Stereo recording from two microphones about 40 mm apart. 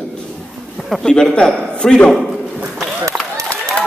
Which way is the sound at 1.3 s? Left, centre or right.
Left.